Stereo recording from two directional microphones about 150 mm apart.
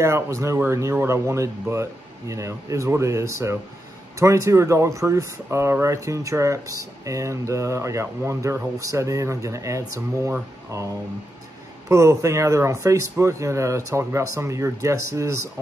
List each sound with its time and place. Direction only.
0.0 s speech: 20° right (ahead or behind)
11.9 s speech: 20° right (ahead or behind)